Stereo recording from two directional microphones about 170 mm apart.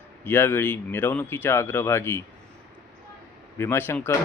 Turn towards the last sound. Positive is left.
turn(degrees=15)  # may be behind; listen again after turning